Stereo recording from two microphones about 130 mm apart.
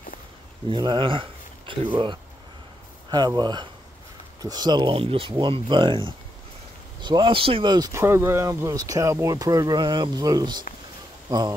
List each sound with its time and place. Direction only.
0.7 s speech: 35° right (ahead or behind)
3.1 s speech: 30° right (ahead or behind)
7.9 s speech: 20° right (ahead or behind)